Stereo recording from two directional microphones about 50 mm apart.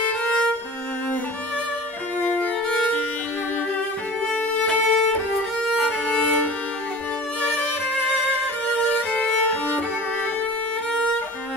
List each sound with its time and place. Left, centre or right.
2.2 s violin: left
4.3 s violin: left
6.0 s music: left
9.1 s violin: left